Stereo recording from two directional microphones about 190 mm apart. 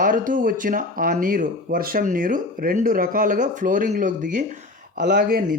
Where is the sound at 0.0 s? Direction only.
45° right (ahead or behind).